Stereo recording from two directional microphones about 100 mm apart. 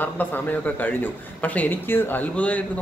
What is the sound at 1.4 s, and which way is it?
Speech, 15° left (ahead or behind).